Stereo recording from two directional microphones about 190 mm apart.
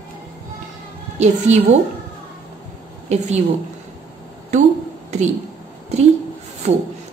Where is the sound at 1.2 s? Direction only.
35° right (ahead or behind).